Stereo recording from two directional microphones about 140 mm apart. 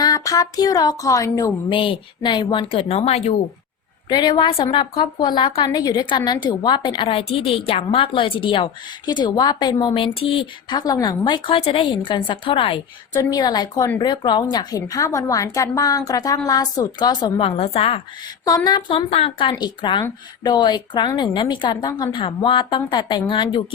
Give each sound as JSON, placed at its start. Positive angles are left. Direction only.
{"t": 0.0, "sound": "a woman's voice", "side_deg": 25}
{"t": 1.7, "sound": "a woman's voice", "side_deg": 40}
{"t": 4.1, "sound": "a woman's voice", "side_deg": 30}
{"t": 13.1, "sound": "a woman's voice", "side_deg": 30}
{"t": 18.4, "sound": "a woman's voice", "side_deg": 30}
{"t": 18.9, "sound": "a woman's voice", "side_deg": 45}